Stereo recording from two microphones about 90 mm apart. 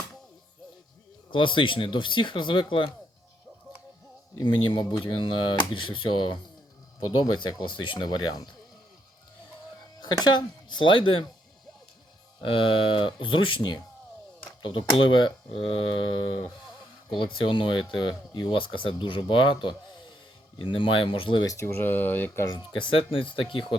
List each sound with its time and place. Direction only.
1.3 s speech: 65° left (ahead or behind)
4.4 s speech: 60° left (ahead or behind)
10.0 s speech: 55° left (ahead or behind)
12.4 s speech: 75° left (ahead or behind)
17.1 s speech: 70° left (ahead or behind)
21.4 s speech: 35° left (ahead or behind)
22.5 s speech: 75° left (ahead or behind)